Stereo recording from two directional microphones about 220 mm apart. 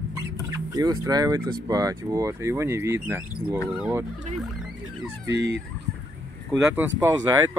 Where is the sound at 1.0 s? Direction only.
15° right (ahead or behind).